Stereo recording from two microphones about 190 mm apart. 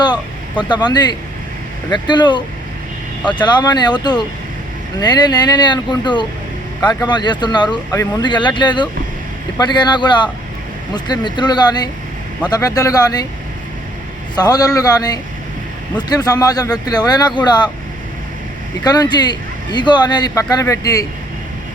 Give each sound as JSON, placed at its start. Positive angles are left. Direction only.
{"t": 0.0, "sound": "speech", "side_deg": 25}
{"t": 14.3, "sound": "speech", "side_deg": 20}
{"t": 18.8, "sound": "speech", "side_deg": 20}